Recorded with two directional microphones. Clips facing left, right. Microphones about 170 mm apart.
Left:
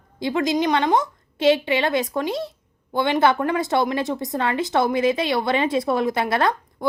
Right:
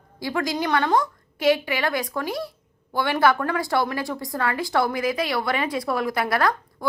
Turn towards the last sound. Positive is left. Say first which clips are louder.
# left 2 dB
turn(degrees=25)  # may be behind; listen again after turning